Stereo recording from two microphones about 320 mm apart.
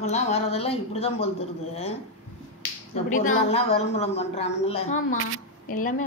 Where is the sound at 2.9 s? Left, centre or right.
Left.